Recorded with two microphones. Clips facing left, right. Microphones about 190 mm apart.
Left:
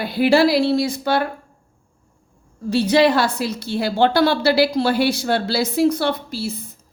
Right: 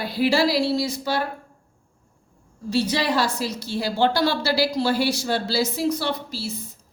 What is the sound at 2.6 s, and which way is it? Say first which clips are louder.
A woman's voice: left 7 dB; 60° left (ahead or behind).